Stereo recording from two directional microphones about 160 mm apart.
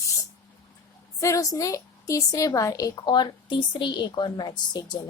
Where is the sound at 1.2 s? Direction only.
20° left (ahead or behind).